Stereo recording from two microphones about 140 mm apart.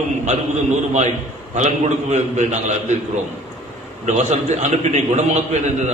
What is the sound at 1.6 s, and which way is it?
A man's voice, 55° right (ahead or behind).